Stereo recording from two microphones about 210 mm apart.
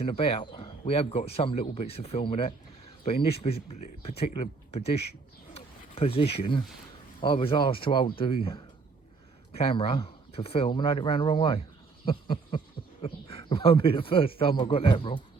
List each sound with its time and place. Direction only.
0.0 s speech: 25° left (ahead or behind)